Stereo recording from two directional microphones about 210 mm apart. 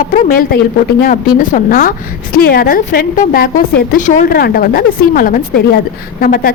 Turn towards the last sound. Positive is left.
turn(degrees=45)  # may be behind; listen again after turning